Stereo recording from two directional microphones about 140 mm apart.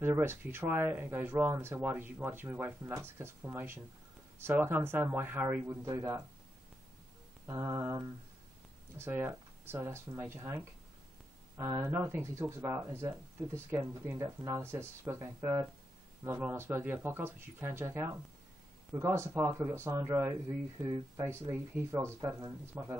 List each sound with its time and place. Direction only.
0.0 s speech: 15° right (ahead or behind)
7.4 s speech: 25° right (ahead or behind)